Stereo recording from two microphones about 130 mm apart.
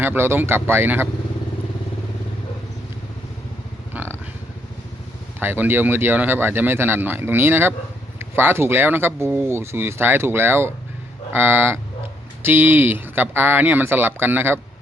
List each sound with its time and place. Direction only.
0.0 s speech: 15° right (ahead or behind)
3.9 s vehicle: 15° right (ahead or behind)
5.4 s speech: 15° right (ahead or behind)